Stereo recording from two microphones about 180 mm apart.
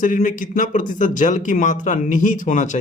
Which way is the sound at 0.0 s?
50° left (ahead or behind).